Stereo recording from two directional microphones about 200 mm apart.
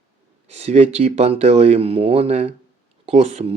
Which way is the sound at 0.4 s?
30° right (ahead or behind).